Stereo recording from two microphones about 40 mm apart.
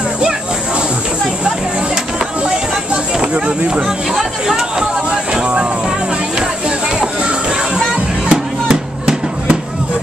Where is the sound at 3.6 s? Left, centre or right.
Right.